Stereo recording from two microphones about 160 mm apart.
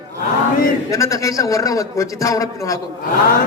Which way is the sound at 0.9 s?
20° left (ahead or behind).